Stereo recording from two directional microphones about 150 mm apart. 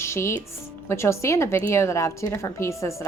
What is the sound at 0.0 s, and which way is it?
A woman's voice, 20° left (ahead or behind).